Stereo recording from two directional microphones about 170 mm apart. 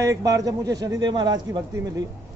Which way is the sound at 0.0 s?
20° right (ahead or behind).